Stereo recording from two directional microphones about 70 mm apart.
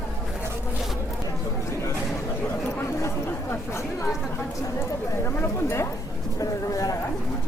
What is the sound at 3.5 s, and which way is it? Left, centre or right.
Speech, left.